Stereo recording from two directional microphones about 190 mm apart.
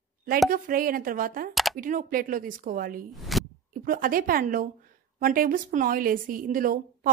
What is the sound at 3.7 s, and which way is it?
A woman's voice, 50° right (ahead or behind).